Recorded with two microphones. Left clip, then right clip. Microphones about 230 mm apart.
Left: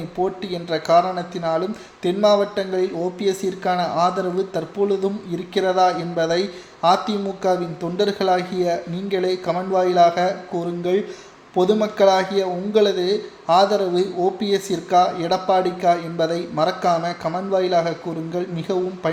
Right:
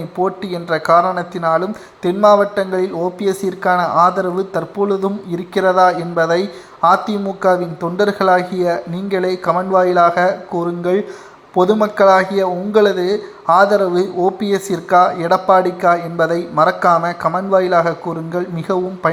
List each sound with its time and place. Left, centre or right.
0.2 s a man's voice: centre